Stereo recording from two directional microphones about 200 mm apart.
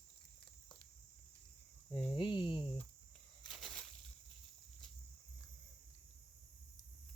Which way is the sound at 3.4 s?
Centre (ahead or behind).